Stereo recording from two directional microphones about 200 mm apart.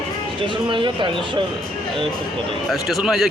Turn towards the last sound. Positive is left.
turn(degrees=0)  # may be behind; listen again after turning